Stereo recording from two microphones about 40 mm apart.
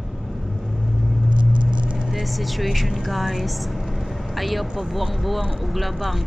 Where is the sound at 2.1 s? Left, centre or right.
Centre.